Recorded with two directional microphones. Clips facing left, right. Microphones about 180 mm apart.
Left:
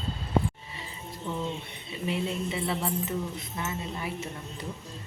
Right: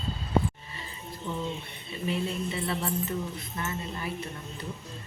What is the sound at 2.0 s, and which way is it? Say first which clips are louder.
Speech: even; 20° left (ahead or behind).